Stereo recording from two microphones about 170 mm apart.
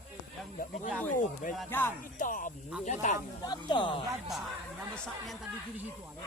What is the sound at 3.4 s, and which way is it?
Speech, 25° left (ahead or behind).